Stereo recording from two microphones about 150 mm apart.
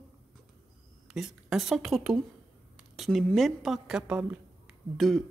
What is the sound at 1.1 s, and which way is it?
A woman's voice, 5° right (ahead or behind).